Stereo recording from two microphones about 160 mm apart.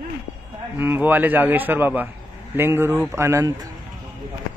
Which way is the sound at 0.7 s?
15° right (ahead or behind).